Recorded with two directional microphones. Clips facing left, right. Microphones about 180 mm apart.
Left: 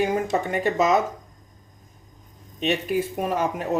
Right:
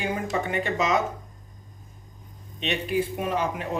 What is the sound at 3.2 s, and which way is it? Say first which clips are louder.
Speech: left 2 dB; 40° left (ahead or behind).